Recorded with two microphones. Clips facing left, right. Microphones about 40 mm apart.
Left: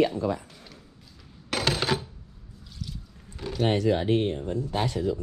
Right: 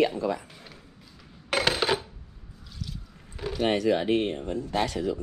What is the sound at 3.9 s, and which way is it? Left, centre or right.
Speech, right.